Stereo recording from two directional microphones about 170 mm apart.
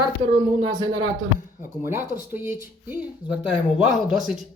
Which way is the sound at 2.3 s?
10° right (ahead or behind).